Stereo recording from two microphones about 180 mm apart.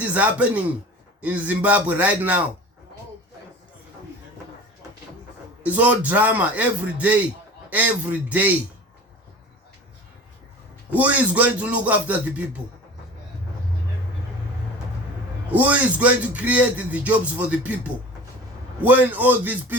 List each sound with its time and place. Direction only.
0.0 s a man's voice: 10° right (ahead or behind)
5.6 s a man's voice: 10° right (ahead or behind)
10.9 s a man's voice: 10° right (ahead or behind)
15.5 s a man's voice: 10° right (ahead or behind)
18.8 s a man's voice: 10° right (ahead or behind)